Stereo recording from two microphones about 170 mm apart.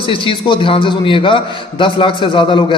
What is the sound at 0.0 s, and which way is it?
A man's voice, 30° left (ahead or behind).